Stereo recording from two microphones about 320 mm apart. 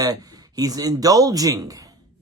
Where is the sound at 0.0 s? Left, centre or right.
Centre.